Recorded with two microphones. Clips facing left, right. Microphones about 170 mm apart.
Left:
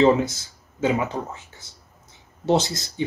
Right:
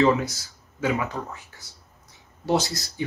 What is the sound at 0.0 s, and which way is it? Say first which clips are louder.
Speech: left 3 dB; 20° left (ahead or behind).